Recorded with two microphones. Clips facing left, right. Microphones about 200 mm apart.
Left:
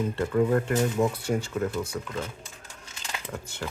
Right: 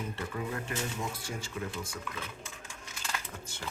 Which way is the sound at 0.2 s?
60° left (ahead or behind).